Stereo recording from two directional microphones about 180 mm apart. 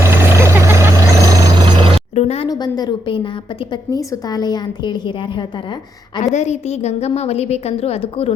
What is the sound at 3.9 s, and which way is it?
Speech, 20° left (ahead or behind).